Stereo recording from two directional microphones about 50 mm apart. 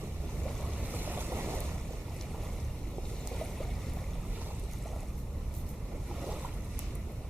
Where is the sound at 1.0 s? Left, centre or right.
Right.